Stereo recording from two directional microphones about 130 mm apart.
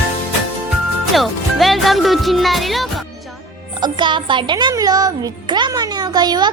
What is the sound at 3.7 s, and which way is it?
A woman's voice, 35° right (ahead or behind).